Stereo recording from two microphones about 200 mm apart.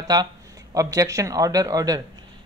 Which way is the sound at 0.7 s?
15° right (ahead or behind).